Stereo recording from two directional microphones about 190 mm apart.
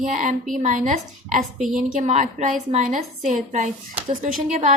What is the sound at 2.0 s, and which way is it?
A woman's voice, 40° right (ahead or behind).